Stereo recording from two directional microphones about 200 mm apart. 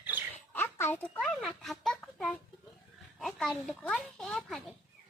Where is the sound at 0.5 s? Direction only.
10° left (ahead or behind).